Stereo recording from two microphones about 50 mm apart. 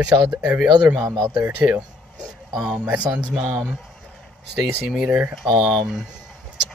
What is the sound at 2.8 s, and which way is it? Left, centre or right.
Speech, right.